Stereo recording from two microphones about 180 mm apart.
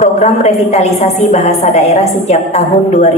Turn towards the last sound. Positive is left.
turn(degrees=35)  # may be behind; listen again after turning